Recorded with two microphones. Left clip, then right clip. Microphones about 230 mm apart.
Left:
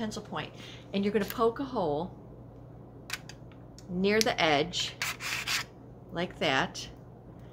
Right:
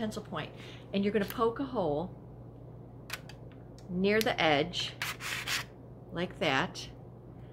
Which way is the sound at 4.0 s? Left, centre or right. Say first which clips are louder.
Left 2 dB; centre.